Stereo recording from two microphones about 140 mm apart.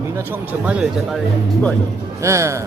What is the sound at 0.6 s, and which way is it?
Speech, 5° right (ahead or behind).